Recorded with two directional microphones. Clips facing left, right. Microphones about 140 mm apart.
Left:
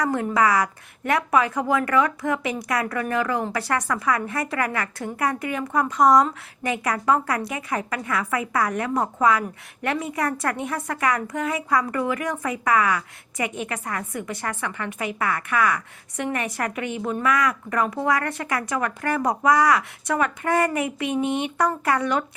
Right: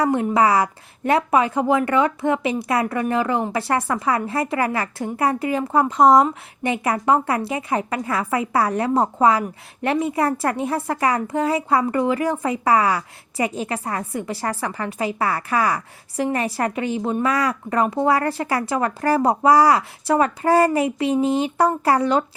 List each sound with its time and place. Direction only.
0.0 s a woman's voice: 25° right (ahead or behind)